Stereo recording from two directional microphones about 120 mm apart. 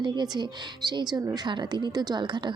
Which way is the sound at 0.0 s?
40° right (ahead or behind).